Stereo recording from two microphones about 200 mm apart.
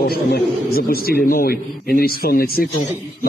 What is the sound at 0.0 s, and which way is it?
A man's voice, 50° left (ahead or behind).